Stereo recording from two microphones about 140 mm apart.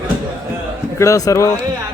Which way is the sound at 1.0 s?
25° left (ahead or behind).